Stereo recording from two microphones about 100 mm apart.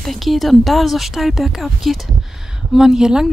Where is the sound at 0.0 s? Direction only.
Centre (ahead or behind).